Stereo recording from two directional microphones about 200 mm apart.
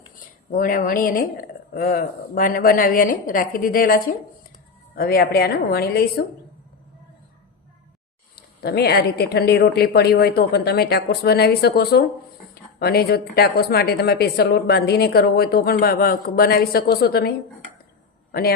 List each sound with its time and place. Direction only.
0.5 s a woman's voice: 40° left (ahead or behind)
8.4 s a woman's voice: 55° left (ahead or behind)